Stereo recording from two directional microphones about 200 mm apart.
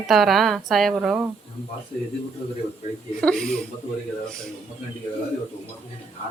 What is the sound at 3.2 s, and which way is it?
Speech, 5° left (ahead or behind).